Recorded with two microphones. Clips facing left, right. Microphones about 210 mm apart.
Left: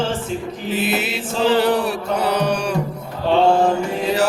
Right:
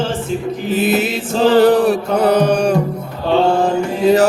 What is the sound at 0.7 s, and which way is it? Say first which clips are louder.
Mantra: right 6 dB; 45° right (ahead or behind).